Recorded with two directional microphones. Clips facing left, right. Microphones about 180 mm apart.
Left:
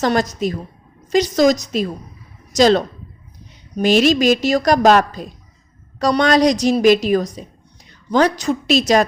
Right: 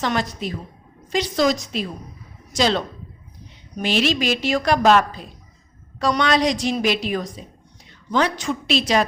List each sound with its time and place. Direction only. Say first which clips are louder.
0.0 s a woman's voice: left 6 dB; 40° left (ahead or behind)